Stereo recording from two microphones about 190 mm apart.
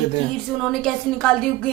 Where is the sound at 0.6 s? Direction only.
5° left (ahead or behind).